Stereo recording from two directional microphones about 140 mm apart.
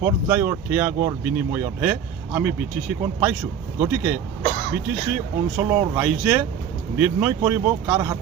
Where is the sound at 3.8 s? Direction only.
15° right (ahead or behind).